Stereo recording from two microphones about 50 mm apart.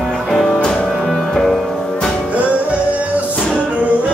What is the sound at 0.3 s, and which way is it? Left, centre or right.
Music, centre.